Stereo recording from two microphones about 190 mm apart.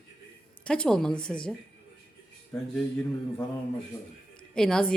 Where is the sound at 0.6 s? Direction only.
5° left (ahead or behind).